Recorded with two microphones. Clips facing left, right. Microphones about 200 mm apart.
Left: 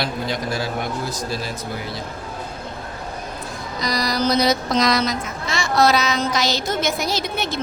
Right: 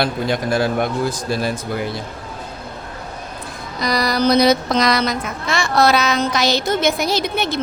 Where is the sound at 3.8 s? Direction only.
60° right (ahead or behind).